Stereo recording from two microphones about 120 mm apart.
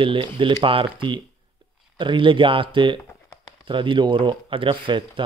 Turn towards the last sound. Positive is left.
turn(degrees=-45)  # may be behind; listen again after turning